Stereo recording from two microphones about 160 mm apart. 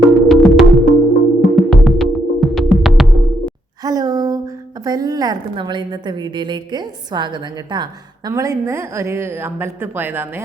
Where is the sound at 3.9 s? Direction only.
20° right (ahead or behind).